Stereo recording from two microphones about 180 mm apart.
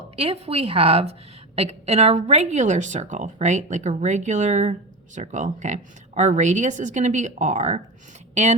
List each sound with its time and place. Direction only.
0.2 s a woman's voice: 35° right (ahead or behind)